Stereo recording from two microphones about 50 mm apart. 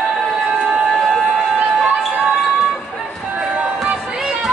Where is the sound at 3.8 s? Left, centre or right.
Centre.